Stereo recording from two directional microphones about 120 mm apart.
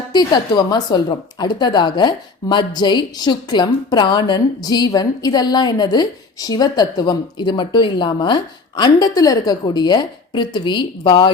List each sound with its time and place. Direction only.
0.1 s a woman's voice: 35° left (ahead or behind)